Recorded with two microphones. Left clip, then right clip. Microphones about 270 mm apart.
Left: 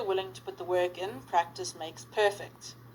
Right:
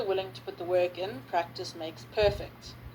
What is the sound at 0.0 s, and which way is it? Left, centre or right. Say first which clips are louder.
A woman's voice: right 1 dB; left.